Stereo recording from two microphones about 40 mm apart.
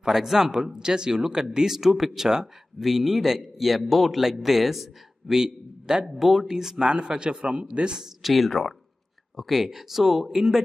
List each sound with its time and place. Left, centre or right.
0.0 s a man's voice: centre
6.9 s a man's voice: right
8.0 s a man's voice: centre
9.5 s speech: centre